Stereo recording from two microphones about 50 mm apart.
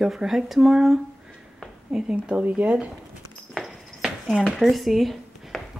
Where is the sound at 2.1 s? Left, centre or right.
Right.